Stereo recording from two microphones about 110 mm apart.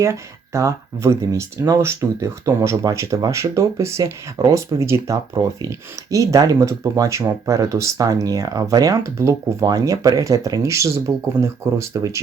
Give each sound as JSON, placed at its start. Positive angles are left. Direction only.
{"t": 0.0, "sound": "speech", "side_deg": -25}